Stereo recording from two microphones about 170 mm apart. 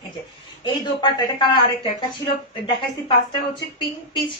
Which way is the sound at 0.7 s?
30° left (ahead or behind).